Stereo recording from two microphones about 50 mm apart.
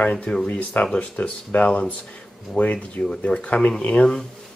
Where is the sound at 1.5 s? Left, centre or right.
Left.